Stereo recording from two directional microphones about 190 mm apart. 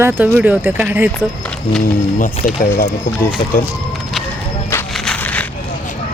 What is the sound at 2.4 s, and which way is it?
Speech, 50° left (ahead or behind).